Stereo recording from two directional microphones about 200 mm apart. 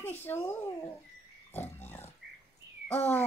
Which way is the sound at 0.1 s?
10° left (ahead or behind).